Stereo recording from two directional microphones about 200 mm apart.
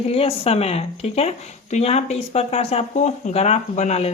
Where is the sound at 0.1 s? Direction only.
30° left (ahead or behind).